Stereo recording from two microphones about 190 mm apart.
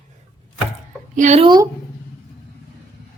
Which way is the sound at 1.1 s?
40° right (ahead or behind).